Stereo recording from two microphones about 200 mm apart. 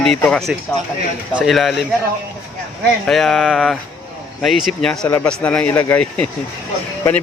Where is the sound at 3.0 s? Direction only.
Centre (ahead or behind).